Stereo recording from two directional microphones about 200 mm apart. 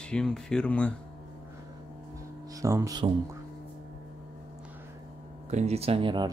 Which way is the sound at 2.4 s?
15° right (ahead or behind).